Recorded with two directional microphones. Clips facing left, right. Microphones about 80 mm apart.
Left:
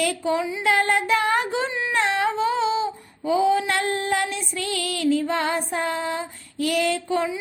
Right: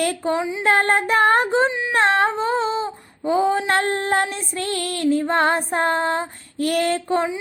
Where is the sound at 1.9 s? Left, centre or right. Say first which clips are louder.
Right 4 dB; right.